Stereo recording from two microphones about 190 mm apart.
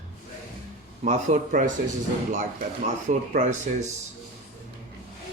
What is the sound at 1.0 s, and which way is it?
Speech, 40° right (ahead or behind).